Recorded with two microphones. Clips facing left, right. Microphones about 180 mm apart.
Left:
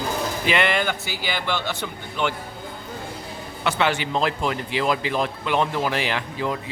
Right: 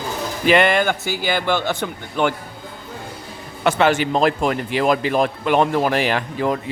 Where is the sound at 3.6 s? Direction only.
45° right (ahead or behind).